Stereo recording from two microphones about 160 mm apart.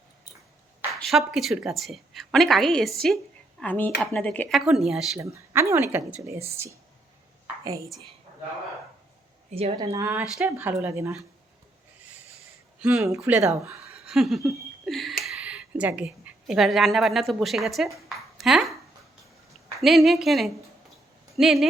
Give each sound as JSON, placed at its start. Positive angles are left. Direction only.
{"t": 1.0, "sound": "a woman's voice", "side_deg": 0}
{"t": 5.2, "sound": "speech", "side_deg": -15}
{"t": 7.6, "sound": "a woman's voice", "side_deg": -20}
{"t": 9.5, "sound": "speech", "side_deg": -40}
{"t": 9.7, "sound": "speech", "side_deg": -25}
{"t": 12.8, "sound": "speech", "side_deg": -15}
{"t": 13.9, "sound": "laughter", "side_deg": 0}
{"t": 15.2, "sound": "a woman's voice", "side_deg": -5}
{"t": 19.8, "sound": "a woman's voice", "side_deg": 0}